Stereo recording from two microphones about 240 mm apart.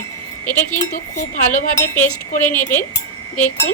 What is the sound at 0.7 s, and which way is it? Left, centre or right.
Speech, left.